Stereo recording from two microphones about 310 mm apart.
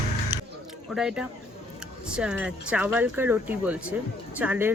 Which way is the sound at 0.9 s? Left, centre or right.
Centre.